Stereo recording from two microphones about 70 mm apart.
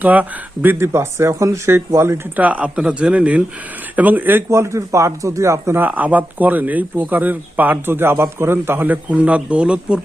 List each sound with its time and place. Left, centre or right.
0.0 s speech: right
0.9 s speech: right
2.3 s speech: right
4.5 s speech: right
5.8 s speech: right